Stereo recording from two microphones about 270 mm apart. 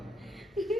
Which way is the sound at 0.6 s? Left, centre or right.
Centre.